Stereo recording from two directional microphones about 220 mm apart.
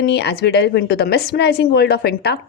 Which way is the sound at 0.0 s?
50° left (ahead or behind).